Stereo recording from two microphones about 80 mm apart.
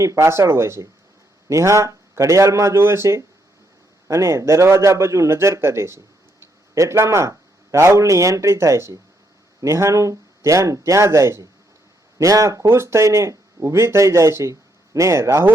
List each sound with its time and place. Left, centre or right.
0.0 s speech: right